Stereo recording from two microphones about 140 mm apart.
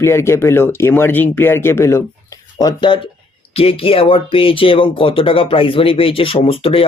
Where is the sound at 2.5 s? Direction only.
30° left (ahead or behind).